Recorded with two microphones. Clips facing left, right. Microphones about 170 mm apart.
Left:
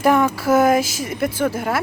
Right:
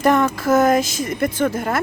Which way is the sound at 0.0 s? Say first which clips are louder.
Even; 10° left (ahead or behind).